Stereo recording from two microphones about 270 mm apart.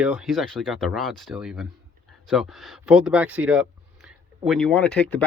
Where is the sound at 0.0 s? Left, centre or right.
Centre.